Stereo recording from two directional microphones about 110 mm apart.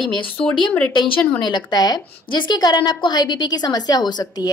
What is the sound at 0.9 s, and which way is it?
Speech, 50° left (ahead or behind).